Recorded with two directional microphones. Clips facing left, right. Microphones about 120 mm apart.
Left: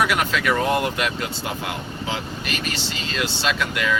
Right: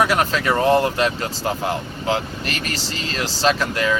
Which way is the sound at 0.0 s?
35° right (ahead or behind).